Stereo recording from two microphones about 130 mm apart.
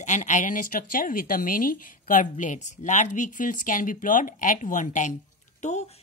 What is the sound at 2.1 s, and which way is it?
A woman's voice, 75° left (ahead or behind).